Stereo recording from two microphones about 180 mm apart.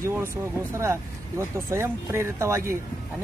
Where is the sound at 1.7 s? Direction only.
15° right (ahead or behind).